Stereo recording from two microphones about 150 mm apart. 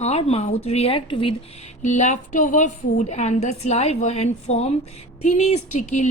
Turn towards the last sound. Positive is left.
turn(degrees=50)  # may be behind; listen again after turning